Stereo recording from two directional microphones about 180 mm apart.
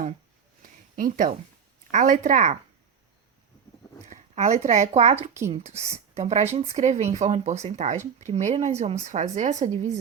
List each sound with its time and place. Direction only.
0.9 s speech: 50° right (ahead or behind)
4.0 s speech: 40° right (ahead or behind)